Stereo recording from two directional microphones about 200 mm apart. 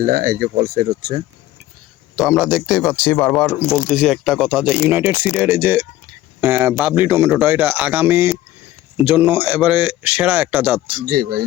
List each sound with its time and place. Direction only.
0.0 s speech: 45° right (ahead or behind)
2.1 s speech: centre (ahead or behind)
11.0 s speech: 45° right (ahead or behind)